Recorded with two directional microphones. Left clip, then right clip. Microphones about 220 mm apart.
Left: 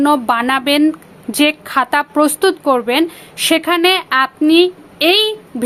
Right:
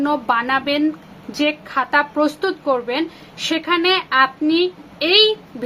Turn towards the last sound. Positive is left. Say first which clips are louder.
# left 1 dB
turn(degrees=50)  # may be behind; listen again after turning